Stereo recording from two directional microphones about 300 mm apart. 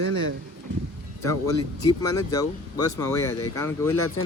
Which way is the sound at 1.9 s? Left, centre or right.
Centre.